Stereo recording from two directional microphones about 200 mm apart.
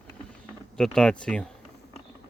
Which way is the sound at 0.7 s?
5° left (ahead or behind).